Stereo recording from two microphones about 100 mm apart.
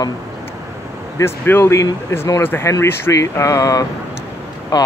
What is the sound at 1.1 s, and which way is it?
A man's voice, 25° left (ahead or behind).